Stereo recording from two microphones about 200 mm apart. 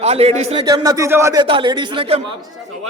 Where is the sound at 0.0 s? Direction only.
30° right (ahead or behind).